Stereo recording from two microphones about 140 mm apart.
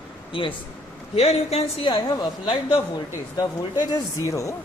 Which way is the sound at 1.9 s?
35° left (ahead or behind).